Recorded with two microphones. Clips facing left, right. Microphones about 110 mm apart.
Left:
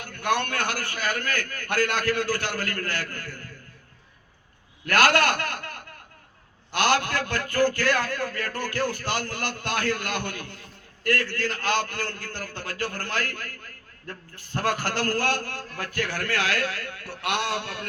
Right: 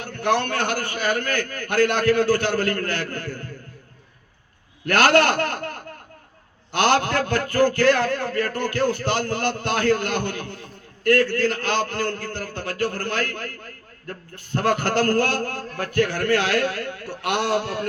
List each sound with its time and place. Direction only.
0.0 s a man's voice: 25° right (ahead or behind)
4.9 s a man's voice: 30° right (ahead or behind)
14.7 s a man's voice: 30° right (ahead or behind)